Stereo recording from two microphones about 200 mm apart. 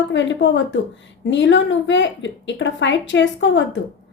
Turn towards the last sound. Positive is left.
turn(degrees=65)  # may be behind; listen again after turning